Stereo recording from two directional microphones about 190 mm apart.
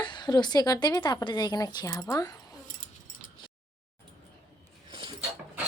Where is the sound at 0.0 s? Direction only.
25° left (ahead or behind).